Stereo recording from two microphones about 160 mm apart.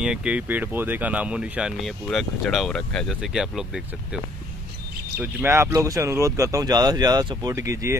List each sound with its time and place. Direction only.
0.0 s speech: 5° right (ahead or behind)
5.2 s speech: 15° right (ahead or behind)